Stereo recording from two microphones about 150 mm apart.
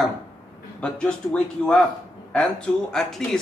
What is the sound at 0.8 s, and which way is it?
Speech, 5° left (ahead or behind).